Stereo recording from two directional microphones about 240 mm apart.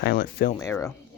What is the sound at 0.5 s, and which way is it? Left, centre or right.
Speech, centre.